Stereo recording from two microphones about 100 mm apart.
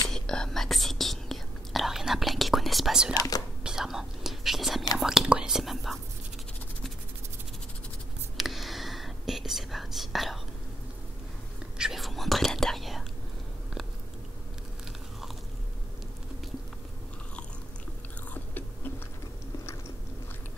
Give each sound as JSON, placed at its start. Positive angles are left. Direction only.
{"t": 0.1, "sound": "whispering", "side_deg": 5}
{"t": 3.2, "sound": "speech", "side_deg": 40}
{"t": 3.6, "sound": "whispering", "side_deg": -5}
{"t": 4.9, "sound": "speech", "side_deg": -5}
{"t": 8.4, "sound": "whispering", "side_deg": 0}
{"t": 11.8, "sound": "whispering", "side_deg": 0}